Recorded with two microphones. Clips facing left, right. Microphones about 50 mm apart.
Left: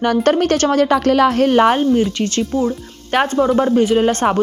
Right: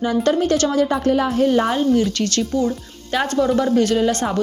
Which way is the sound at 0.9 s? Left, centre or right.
Left.